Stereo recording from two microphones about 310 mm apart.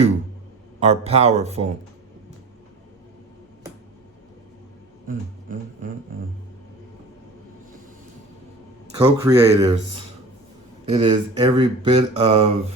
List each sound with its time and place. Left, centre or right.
0.8 s speech: centre
9.0 s speech: centre
10.8 s speech: centre